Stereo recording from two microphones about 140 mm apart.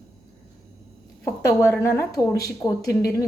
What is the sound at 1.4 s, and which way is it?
A woman's voice, 20° left (ahead or behind).